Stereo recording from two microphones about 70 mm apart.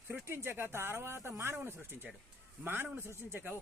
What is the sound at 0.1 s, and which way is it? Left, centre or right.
A man's voice, right.